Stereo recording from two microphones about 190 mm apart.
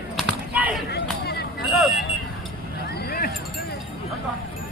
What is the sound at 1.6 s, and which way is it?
Vehicle, centre (ahead or behind).